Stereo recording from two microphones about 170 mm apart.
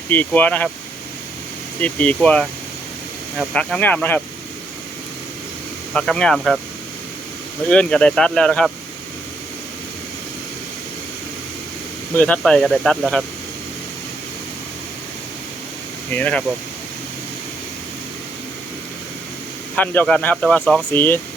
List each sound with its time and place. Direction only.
0.1 s speech: 10° left (ahead or behind)
1.8 s speech: 10° left (ahead or behind)
5.9 s speech: 5° left (ahead or behind)
7.7 s speech: 5° left (ahead or behind)
12.1 s speech: 5° left (ahead or behind)
16.1 s speech: 10° left (ahead or behind)
19.7 s speech: 10° left (ahead or behind)